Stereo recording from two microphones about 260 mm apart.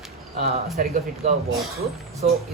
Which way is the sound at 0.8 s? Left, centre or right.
Right.